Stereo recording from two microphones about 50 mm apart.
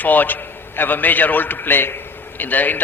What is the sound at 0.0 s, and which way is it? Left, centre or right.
A man's voice, left.